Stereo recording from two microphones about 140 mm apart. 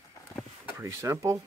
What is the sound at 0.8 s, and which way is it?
Speech, 20° right (ahead or behind).